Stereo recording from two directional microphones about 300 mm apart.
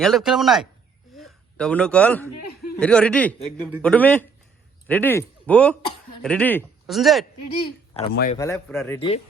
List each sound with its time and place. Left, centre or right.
0.0 s speech: centre
1.1 s a sound: centre
2.7 s speech: centre
8.1 s speech: left
8.4 s speech: centre